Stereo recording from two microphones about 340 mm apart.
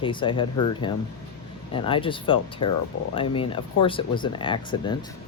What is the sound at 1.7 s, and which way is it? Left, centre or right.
Speech, centre.